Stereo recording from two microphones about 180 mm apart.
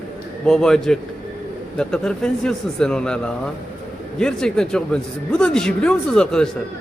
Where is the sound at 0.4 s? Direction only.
5° left (ahead or behind).